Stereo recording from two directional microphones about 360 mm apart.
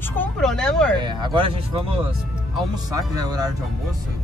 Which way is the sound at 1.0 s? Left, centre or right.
Centre.